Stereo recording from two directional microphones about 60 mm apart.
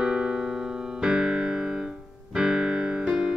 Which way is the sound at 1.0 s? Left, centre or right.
Centre.